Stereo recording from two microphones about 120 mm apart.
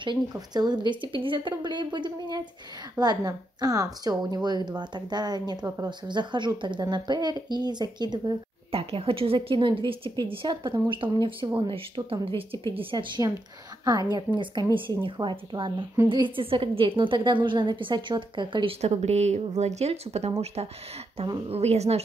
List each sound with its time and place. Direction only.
0.0 s a woman's voice: 40° right (ahead or behind)
8.7 s a woman's voice: 50° right (ahead or behind)
12.9 s a woman's voice: 35° right (ahead or behind)
18.8 s speech: 65° right (ahead or behind)